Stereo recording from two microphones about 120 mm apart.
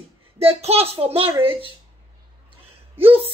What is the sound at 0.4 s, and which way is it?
Speech, 55° right (ahead or behind).